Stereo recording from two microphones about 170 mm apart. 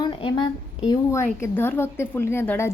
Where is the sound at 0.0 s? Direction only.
30° left (ahead or behind).